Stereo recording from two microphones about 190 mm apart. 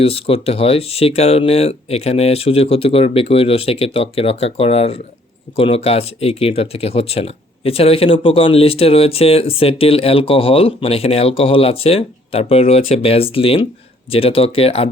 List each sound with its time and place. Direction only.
0.0 s speech: 30° left (ahead or behind)